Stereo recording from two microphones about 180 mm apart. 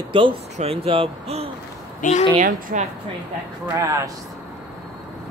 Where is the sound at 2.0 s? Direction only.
40° left (ahead or behind).